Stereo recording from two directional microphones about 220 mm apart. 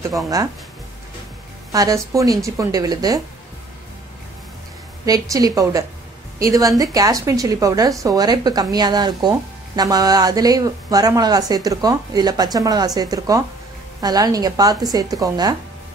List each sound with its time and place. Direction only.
1.7 s a woman's voice: 15° right (ahead or behind)
5.0 s a woman's voice: 15° right (ahead or behind)